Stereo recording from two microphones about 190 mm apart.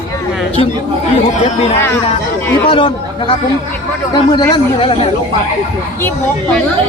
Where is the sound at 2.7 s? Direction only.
25° left (ahead or behind).